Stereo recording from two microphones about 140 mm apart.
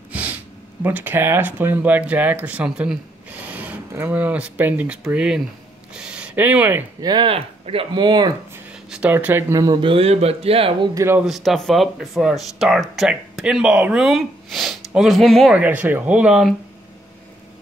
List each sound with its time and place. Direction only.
0.1 s gasp: 10° right (ahead or behind)
0.8 s speech: 15° right (ahead or behind)
7.0 s speech: 30° right (ahead or behind)
8.9 s speech: 10° right (ahead or behind); by 10.9 s 45° right (ahead or behind)
11.0 s speech: 20° right (ahead or behind)
11.2 s speech: centre (ahead or behind)
15.5 s speech: 10° right (ahead or behind)